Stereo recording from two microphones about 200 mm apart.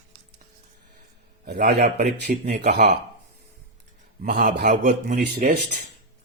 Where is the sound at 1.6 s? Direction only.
55° right (ahead or behind).